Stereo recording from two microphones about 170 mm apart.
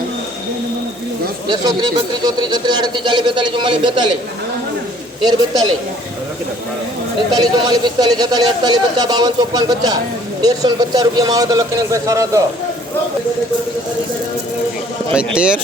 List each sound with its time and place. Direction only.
2.2 s a man's voice: 25° right (ahead or behind)
5.2 s a man's voice: 25° right (ahead or behind)
7.3 s a man's voice: 25° right (ahead or behind)
15.1 s speech: 5° right (ahead or behind)